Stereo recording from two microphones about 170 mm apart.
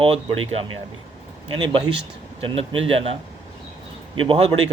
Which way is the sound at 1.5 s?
25° right (ahead or behind).